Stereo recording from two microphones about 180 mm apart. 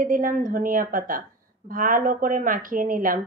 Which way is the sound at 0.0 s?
50° right (ahead or behind).